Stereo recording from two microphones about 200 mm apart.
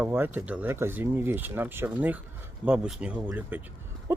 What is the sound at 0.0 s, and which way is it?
Speech, 10° right (ahead or behind).